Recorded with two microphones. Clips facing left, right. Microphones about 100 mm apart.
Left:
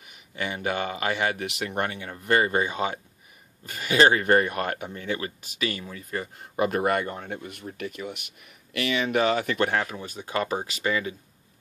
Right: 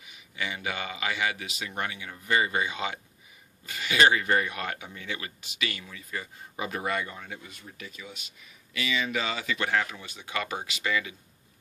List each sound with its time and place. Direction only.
0.4 s speech: 45° left (ahead or behind)